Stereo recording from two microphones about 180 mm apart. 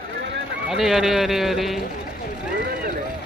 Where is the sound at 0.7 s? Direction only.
Centre (ahead or behind).